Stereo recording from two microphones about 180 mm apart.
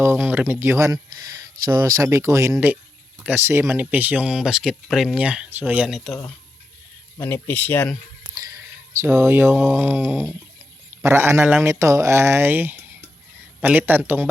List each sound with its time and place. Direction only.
0.0 s speech: 15° right (ahead or behind)
7.2 s speech: 10° left (ahead or behind)
9.0 s speech: 15° right (ahead or behind)